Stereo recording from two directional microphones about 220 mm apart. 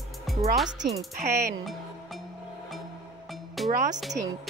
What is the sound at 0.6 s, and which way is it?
Speech, 5° right (ahead or behind).